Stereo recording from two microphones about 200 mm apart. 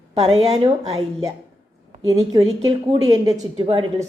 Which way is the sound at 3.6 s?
30° right (ahead or behind).